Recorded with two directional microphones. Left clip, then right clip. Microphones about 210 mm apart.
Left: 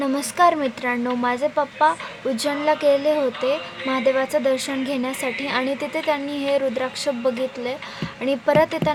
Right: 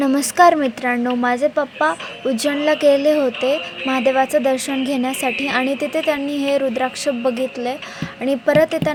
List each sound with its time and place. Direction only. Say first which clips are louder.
0.0 s speech: right 5 dB; 20° right (ahead or behind)